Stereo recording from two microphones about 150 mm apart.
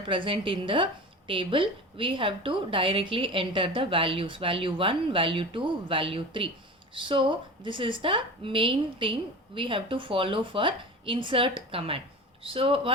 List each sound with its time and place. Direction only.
0.0 s a woman's voice: 35° right (ahead or behind)